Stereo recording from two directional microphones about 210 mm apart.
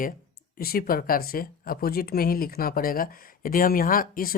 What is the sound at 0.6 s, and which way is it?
Speech, 45° left (ahead or behind).